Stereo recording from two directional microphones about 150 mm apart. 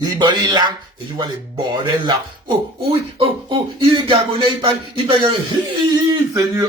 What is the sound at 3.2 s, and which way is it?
Speech, 35° right (ahead or behind).